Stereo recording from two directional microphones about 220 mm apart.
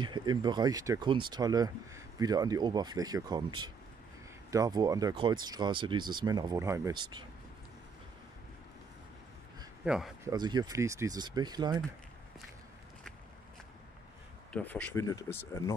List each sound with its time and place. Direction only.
0.0 s speech: 20° right (ahead or behind)
9.8 s speech: centre (ahead or behind)
10.2 s speech: 20° right (ahead or behind)
14.5 s speech: 5° left (ahead or behind)